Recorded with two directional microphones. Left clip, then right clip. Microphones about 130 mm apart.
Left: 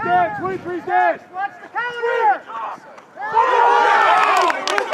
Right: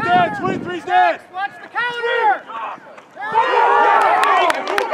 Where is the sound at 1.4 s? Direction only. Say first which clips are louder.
Right 2 dB; 15° right (ahead or behind).